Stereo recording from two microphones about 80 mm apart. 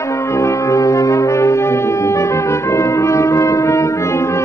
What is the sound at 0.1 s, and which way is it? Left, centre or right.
Brass instrument, left.